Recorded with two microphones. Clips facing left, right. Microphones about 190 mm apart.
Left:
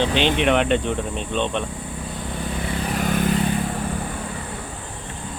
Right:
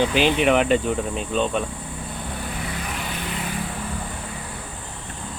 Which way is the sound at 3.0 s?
45° left (ahead or behind).